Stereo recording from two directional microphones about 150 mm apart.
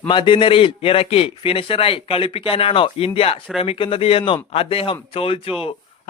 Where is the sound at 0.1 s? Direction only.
30° left (ahead or behind).